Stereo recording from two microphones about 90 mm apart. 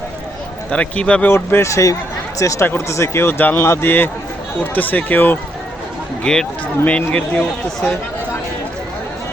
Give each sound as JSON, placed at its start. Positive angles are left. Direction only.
{"t": 0.7, "sound": "speech", "side_deg": 10}
{"t": 1.3, "sound": "speech", "side_deg": 25}
{"t": 6.3, "sound": "speech", "side_deg": 10}